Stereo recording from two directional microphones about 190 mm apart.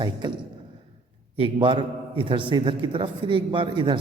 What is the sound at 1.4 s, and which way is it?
A man's voice, 25° right (ahead or behind).